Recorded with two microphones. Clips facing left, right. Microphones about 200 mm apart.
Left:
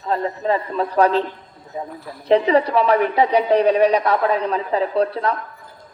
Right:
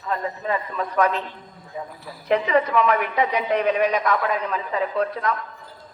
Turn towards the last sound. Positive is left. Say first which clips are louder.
# left 4 dB
turn(degrees=35)  # may be behind; listen again after turning